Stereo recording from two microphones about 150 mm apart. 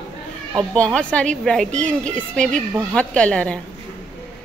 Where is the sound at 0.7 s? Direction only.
5° left (ahead or behind).